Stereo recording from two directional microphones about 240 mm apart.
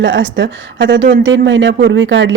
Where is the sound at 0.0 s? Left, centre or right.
Right.